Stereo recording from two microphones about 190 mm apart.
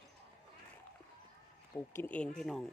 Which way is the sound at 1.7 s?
10° left (ahead or behind).